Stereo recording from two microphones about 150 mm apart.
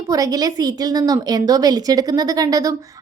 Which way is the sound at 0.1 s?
25° right (ahead or behind).